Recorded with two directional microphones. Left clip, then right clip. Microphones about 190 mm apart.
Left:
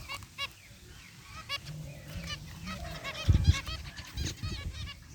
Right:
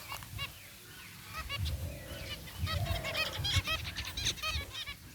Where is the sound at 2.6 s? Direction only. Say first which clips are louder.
Right 3 dB; 25° right (ahead or behind).